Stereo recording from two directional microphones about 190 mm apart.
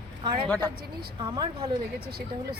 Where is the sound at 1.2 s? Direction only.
25° right (ahead or behind).